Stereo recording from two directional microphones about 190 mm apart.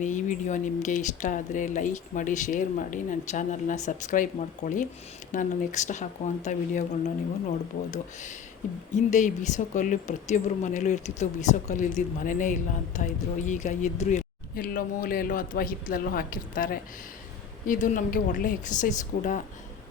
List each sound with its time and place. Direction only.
0.0 s speech: 40° left (ahead or behind)
7.9 s speech: 40° left (ahead or behind)